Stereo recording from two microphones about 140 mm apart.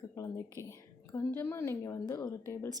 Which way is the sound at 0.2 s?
25° left (ahead or behind).